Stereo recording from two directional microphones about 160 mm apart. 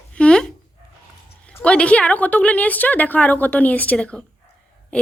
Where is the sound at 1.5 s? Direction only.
5° left (ahead or behind).